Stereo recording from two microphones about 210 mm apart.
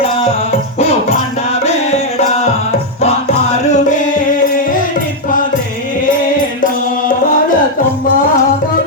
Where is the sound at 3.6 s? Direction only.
35° left (ahead or behind).